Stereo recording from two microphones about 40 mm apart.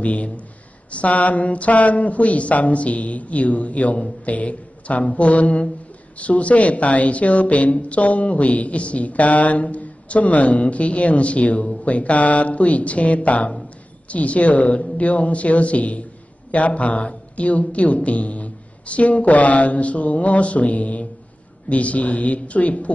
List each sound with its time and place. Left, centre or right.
0.0 s a woman's voice: left